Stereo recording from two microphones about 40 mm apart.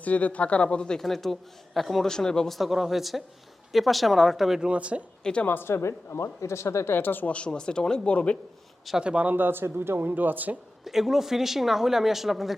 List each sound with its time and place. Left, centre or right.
0.0 s speech: left
0.9 s speech: centre
2.0 s speech: centre
2.5 s speech: centre
4.7 s speech: right
5.2 s a woman's voice: left
5.5 s speech: left
6.8 s speech: left
7.3 s speech: left
8.1 s speech: left
9.0 s speech: right
9.2 s a man's voice: right
10.0 s speech: right
10.8 s speech: centre